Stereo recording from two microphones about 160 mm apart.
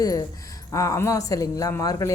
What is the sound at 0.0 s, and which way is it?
A man's voice, 25° left (ahead or behind).